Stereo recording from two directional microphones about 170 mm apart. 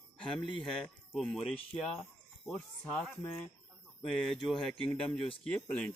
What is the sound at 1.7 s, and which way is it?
Speech, 35° left (ahead or behind).